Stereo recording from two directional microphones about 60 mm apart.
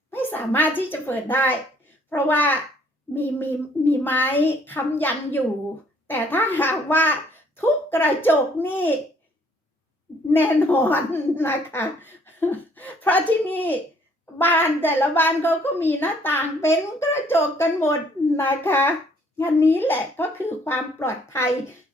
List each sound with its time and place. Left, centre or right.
0.1 s a woman's voice: left
10.3 s speech: left
16.6 s speech: left